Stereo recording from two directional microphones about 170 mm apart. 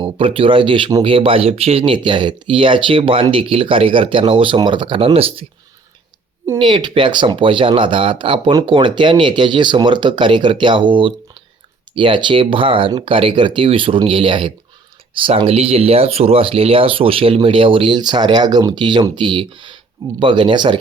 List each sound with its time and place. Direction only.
0.0 s speech: 30° right (ahead or behind)
6.6 s speech: 25° right (ahead or behind)